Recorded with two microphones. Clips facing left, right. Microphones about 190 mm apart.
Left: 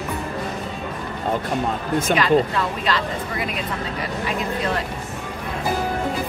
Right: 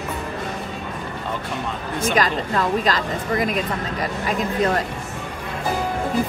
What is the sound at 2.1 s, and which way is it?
A woman's voice, 40° right (ahead or behind).